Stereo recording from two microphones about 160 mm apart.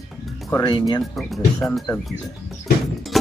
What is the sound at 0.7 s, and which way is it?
Speech, 25° left (ahead or behind).